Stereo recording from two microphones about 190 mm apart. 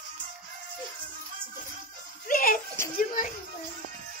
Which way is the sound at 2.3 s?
50° left (ahead or behind).